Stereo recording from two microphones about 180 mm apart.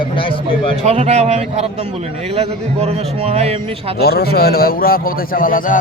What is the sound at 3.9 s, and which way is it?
A man's voice, 60° left (ahead or behind).